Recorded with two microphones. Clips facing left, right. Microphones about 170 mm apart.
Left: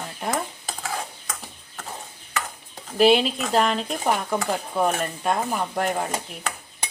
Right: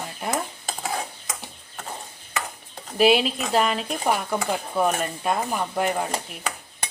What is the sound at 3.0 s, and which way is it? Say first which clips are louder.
Speech: left 1 dB; 5° right (ahead or behind).